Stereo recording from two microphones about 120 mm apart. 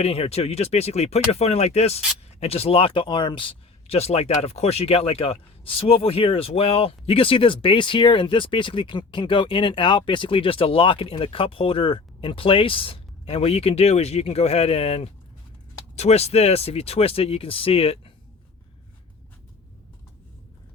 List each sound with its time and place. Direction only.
0.0 s speech: 55° left (ahead or behind)